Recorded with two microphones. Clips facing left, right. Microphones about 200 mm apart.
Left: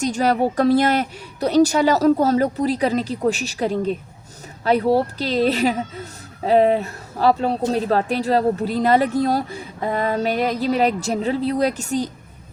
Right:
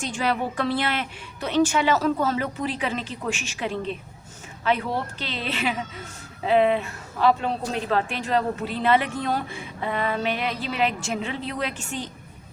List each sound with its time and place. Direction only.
0.0 s a woman's voice: 40° left (ahead or behind)